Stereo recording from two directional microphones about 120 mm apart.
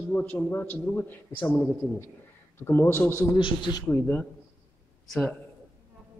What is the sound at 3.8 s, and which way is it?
Speech, 15° left (ahead or behind).